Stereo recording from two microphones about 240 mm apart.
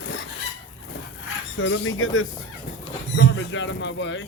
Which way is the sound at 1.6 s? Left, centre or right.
Left.